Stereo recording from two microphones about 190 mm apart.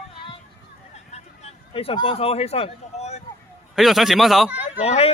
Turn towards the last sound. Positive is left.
turn(degrees=35)  # may be behind; listen again after turning